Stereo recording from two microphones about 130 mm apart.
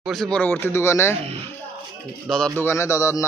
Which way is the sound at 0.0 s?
Centre (ahead or behind).